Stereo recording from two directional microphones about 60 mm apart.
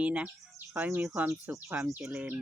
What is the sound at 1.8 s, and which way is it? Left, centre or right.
Speech, right.